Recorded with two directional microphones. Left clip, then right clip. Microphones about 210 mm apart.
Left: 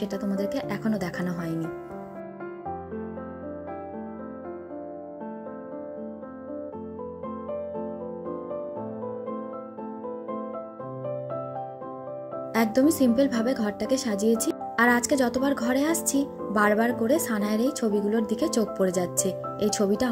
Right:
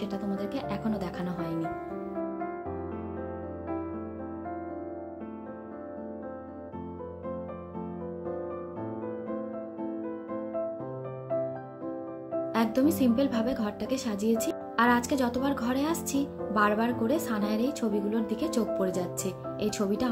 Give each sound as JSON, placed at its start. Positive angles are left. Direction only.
{"t": 0.0, "sound": "speech", "side_deg": 30}
{"t": 12.5, "sound": "speech", "side_deg": 25}